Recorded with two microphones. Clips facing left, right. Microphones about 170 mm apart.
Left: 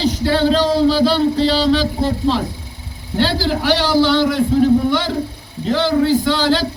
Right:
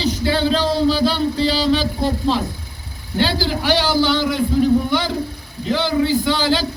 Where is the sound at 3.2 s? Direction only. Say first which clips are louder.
Left 2 dB; centre (ahead or behind).